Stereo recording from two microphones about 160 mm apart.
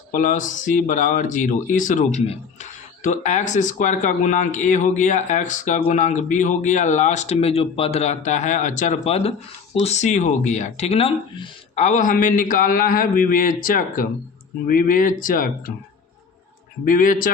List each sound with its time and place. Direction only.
0.1 s speech: 55° left (ahead or behind)
16.8 s speech: 60° left (ahead or behind)